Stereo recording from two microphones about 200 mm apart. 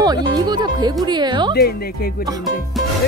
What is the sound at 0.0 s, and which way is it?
Speech, 20° right (ahead or behind).